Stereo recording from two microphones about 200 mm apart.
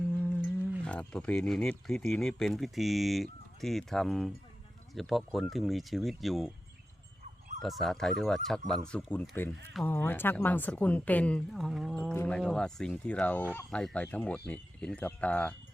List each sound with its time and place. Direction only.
0.8 s speech: 5° left (ahead or behind)
7.6 s a woman's voice: centre (ahead or behind)